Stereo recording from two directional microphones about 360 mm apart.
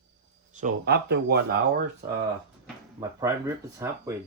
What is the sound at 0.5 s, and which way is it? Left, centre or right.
Speech, right.